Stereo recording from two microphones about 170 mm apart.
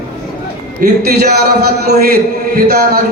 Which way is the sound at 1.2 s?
70° right (ahead or behind).